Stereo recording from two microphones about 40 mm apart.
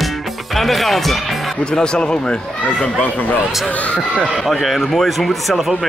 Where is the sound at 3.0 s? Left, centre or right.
Left.